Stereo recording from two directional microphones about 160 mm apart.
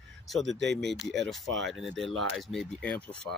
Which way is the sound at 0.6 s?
90° right.